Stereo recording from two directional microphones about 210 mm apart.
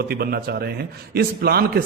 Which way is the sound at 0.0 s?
45° right (ahead or behind).